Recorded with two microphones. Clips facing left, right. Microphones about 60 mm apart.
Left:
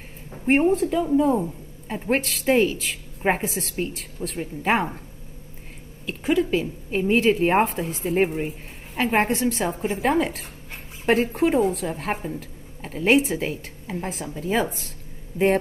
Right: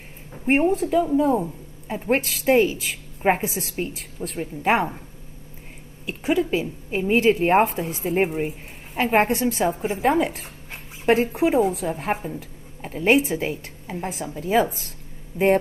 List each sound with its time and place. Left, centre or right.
0.5 s a woman's voice: centre
1.4 s a sound: centre
2.2 s a woman's voice: centre
6.0 s a woman's voice: centre
12.4 s a sound: centre
13.0 s a woman's voice: centre